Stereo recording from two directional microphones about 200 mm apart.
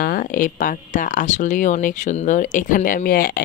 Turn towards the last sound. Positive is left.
turn(degrees=45)  # may be behind; listen again after turning